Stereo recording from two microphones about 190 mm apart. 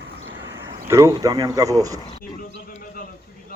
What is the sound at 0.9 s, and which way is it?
Speech, 15° right (ahead or behind).